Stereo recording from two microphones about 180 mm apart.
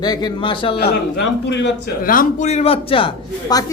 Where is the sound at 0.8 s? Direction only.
70° left (ahead or behind); by 1.7 s 85° left.